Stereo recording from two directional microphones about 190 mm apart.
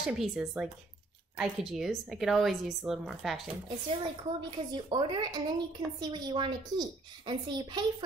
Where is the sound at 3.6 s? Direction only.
25° right (ahead or behind).